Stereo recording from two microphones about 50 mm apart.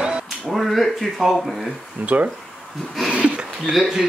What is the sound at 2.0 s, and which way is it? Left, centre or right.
Speech, right.